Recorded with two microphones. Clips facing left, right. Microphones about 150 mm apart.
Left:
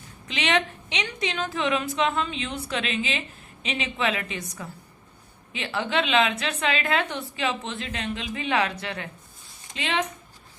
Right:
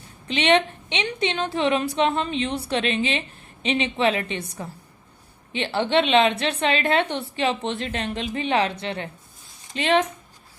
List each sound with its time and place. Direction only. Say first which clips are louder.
0.3 s a woman's voice: right 6 dB; 30° right (ahead or behind)
9.7 s a woman's voice: right 9 dB; 40° right (ahead or behind)